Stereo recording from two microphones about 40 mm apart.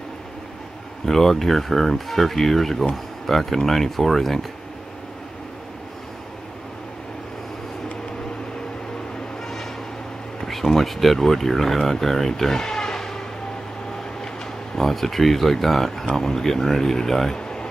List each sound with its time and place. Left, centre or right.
1.0 s speech: centre
10.4 s speech: centre
14.8 s speech: centre
17.4 s a sound: centre